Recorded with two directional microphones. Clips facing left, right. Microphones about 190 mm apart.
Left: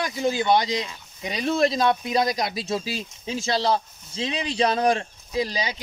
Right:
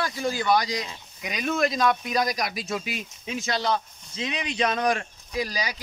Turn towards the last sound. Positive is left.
turn(degrees=25)  # may be behind; listen again after turning